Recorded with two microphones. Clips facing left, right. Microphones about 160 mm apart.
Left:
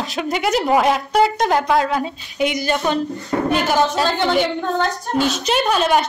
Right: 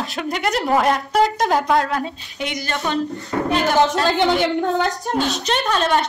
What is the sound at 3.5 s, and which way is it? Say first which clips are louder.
Speech: right 1 dB; centre (ahead or behind).